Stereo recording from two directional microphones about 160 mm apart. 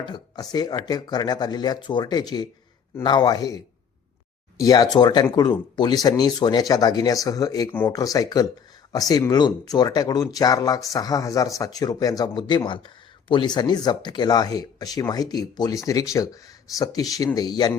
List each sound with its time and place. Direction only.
0.0 s speech: 25° left (ahead or behind)
7.7 s speech: 10° left (ahead or behind)
7.9 s speech: 25° left (ahead or behind)